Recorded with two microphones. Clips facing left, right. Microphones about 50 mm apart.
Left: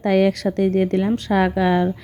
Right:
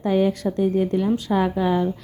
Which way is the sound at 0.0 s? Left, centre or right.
Left.